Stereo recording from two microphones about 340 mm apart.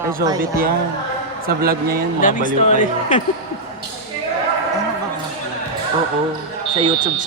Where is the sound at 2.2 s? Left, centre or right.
Left.